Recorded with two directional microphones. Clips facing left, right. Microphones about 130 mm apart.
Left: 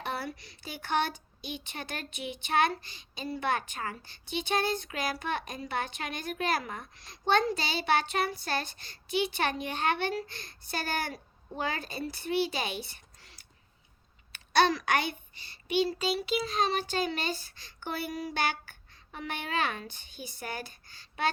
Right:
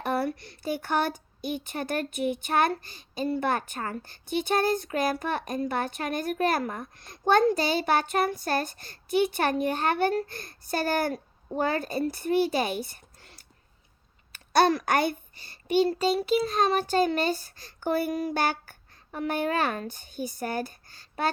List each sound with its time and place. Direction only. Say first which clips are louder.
0.0 s a child's voice: right 8 dB; 50° right (ahead or behind)